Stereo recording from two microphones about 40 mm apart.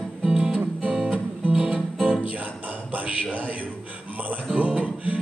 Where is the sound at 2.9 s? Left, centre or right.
Right.